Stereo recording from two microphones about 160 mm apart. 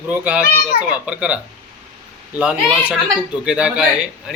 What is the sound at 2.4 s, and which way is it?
Speech, 5° right (ahead or behind).